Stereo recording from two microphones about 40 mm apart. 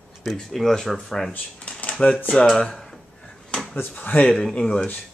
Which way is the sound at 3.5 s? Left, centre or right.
Left.